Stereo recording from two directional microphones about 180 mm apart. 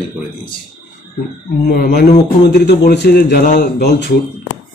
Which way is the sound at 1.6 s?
60° left (ahead or behind).